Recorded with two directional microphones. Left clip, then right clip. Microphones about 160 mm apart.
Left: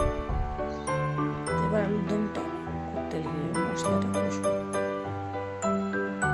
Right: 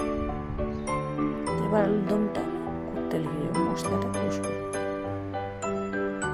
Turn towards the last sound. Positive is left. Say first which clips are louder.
# left 2 dB
turn(degrees=-15)  # may be behind; listen again after turning